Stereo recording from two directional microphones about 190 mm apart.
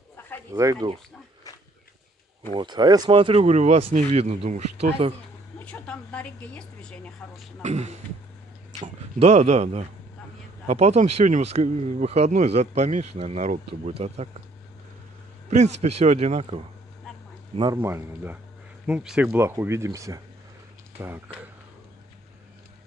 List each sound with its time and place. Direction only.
0.5 s speech: 20° right (ahead or behind)
2.5 s speech: 25° right (ahead or behind)
5.7 s speech: 5° left (ahead or behind)
7.6 s speech: 35° right (ahead or behind)
15.5 s speech: 35° right (ahead or behind)
17.8 s speech: 10° right (ahead or behind)